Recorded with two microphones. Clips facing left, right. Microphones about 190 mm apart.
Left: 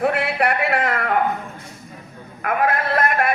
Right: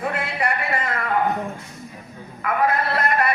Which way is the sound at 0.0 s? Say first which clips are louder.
Left 5 dB; 65° left (ahead or behind).